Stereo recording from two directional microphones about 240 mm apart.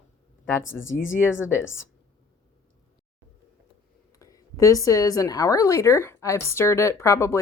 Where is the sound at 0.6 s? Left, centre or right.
Left.